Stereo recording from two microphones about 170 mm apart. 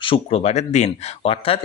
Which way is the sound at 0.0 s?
30° left (ahead or behind).